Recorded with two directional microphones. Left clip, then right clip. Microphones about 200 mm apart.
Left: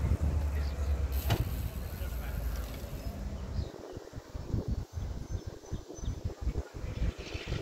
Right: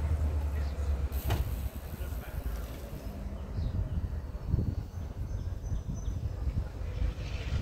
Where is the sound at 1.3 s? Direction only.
45° left (ahead or behind).